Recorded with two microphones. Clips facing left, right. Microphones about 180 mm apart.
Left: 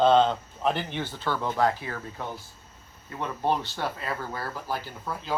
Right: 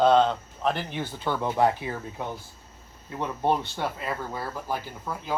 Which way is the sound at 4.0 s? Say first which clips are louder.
Right 1 dB; 5° right (ahead or behind).